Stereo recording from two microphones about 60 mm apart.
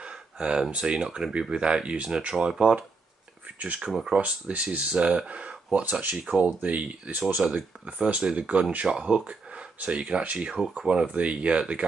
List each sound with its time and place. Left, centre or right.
0.0 s speech: centre
7.4 s speech: centre